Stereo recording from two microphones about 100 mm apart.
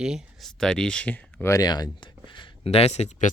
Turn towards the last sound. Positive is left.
turn(degrees=90)